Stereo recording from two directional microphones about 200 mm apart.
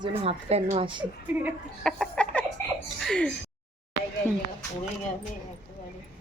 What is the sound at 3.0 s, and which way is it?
Speech, 5° left (ahead or behind).